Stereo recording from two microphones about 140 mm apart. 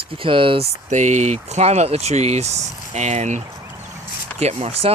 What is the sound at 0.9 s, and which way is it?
Speech, 60° right (ahead or behind).